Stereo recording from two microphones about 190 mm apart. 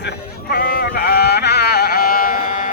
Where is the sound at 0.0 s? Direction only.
55° left (ahead or behind).